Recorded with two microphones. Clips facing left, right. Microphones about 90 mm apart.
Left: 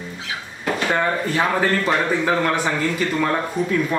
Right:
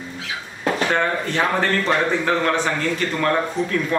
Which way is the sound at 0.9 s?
10° left (ahead or behind).